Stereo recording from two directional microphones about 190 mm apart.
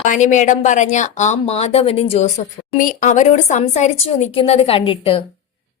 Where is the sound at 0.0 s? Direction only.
40° left (ahead or behind).